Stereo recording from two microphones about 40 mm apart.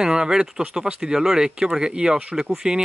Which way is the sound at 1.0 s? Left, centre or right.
Centre.